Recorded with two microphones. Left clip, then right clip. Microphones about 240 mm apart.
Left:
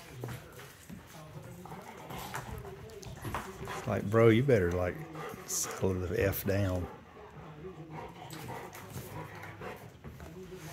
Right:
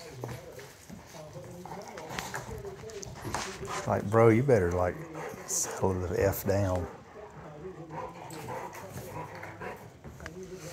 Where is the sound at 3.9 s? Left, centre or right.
Left.